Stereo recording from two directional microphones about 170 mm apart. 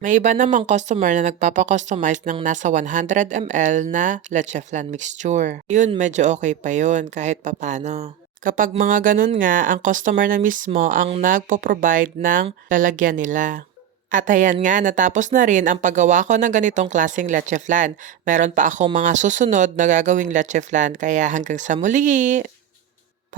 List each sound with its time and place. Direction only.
0.0 s a woman's voice: 50° right (ahead or behind)